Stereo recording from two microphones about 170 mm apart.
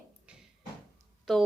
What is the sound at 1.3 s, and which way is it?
Speech, centre (ahead or behind).